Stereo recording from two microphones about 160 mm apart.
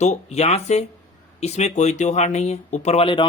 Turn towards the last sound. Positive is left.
turn(degrees=35)  # may be behind; listen again after turning